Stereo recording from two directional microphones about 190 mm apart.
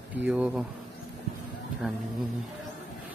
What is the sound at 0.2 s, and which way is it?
Speech, 5° right (ahead or behind).